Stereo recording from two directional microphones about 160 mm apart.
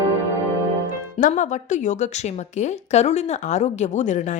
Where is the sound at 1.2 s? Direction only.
50° left (ahead or behind).